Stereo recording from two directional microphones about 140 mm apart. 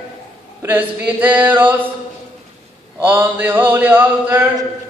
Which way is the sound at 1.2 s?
15° right (ahead or behind).